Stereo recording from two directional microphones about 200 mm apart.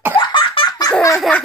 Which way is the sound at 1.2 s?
5° left (ahead or behind).